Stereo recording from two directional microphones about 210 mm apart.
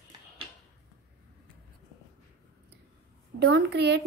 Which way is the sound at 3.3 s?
55° right (ahead or behind).